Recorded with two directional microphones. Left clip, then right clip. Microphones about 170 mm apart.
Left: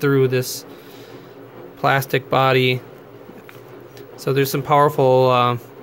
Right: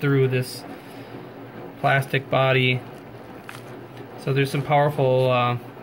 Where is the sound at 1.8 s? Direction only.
35° left (ahead or behind).